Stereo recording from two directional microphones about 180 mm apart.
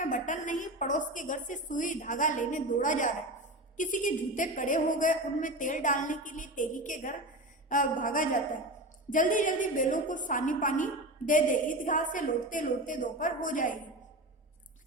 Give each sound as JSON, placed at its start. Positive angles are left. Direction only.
{"t": 0.0, "sound": "a woman's voice", "side_deg": 45}